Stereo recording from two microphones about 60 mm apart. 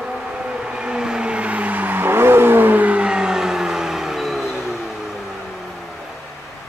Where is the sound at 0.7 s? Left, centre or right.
Centre.